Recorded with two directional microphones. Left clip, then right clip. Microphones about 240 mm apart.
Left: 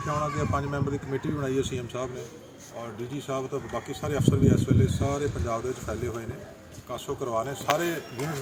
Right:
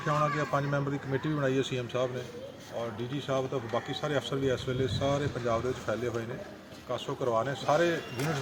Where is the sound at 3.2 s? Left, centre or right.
Centre.